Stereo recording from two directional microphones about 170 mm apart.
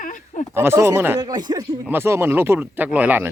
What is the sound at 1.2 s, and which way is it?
Speech, 25° right (ahead or behind).